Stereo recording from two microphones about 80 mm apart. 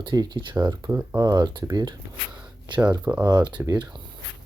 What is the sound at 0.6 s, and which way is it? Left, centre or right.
Speech, right.